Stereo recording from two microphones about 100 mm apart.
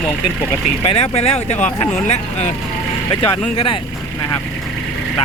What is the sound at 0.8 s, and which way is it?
Speech, 90° left.